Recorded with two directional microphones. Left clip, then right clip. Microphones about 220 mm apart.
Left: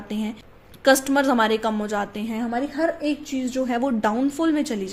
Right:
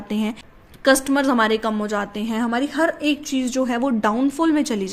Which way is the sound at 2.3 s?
30° right (ahead or behind).